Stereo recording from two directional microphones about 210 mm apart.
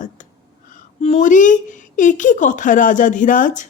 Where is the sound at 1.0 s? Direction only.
35° left (ahead or behind).